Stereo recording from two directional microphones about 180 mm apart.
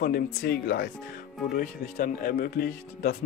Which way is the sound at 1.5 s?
50° left (ahead or behind).